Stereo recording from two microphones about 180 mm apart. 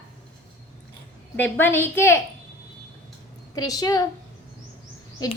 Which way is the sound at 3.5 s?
20° left (ahead or behind).